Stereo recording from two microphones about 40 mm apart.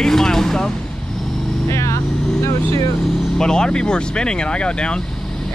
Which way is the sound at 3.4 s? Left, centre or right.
Centre.